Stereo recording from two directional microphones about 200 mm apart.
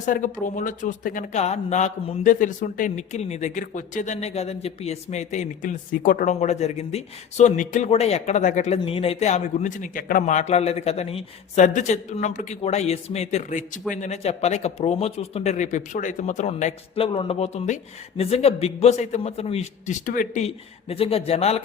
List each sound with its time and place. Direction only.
0.0 s speech: 40° left (ahead or behind)